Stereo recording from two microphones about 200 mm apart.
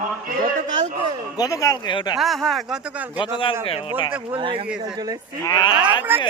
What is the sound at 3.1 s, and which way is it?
Speech, 25° left (ahead or behind).